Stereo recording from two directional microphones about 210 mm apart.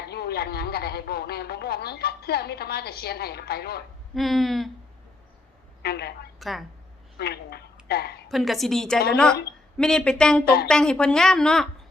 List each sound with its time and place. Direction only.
0.0 s speech: 50° left (ahead or behind)
4.1 s a woman's voice: centre (ahead or behind)
5.8 s speech: 50° left (ahead or behind)
6.4 s a woman's voice: centre (ahead or behind)
7.2 s a woman's voice: 50° left (ahead or behind)
8.3 s a woman's voice: centre (ahead or behind)
10.4 s speech: 50° left (ahead or behind)
10.7 s a woman's voice: 5° left (ahead or behind)